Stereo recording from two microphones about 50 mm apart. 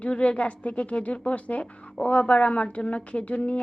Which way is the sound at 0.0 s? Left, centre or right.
Left.